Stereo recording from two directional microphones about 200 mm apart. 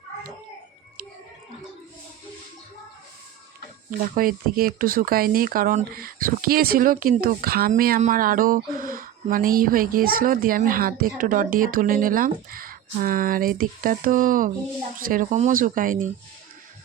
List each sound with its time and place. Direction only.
4.1 s speech: 45° right (ahead or behind)